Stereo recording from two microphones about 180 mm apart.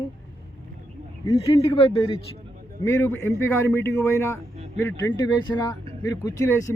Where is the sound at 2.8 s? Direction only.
15° left (ahead or behind).